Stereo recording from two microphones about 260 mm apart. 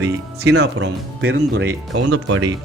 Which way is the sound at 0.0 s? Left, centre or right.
Right.